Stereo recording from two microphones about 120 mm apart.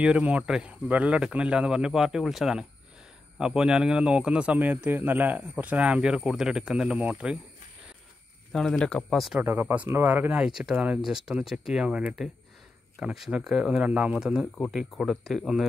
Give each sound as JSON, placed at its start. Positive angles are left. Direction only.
{"t": 0.0, "sound": "speech", "side_deg": -10}
{"t": 8.5, "sound": "speech", "side_deg": 5}
{"t": 9.4, "sound": "speech", "side_deg": -20}
{"t": 10.4, "sound": "speech", "side_deg": -5}